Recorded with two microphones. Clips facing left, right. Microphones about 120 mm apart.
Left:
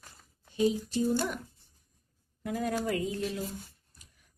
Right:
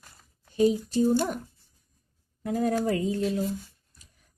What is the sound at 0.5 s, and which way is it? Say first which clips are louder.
Speech: right 5 dB; 40° right (ahead or behind).